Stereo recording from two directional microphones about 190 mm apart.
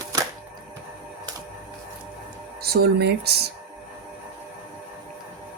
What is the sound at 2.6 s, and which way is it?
Speech, 55° right (ahead or behind).